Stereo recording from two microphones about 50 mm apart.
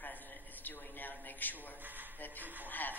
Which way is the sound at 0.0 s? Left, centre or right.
Left.